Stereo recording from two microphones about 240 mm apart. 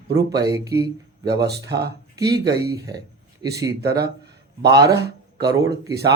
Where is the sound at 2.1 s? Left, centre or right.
Centre.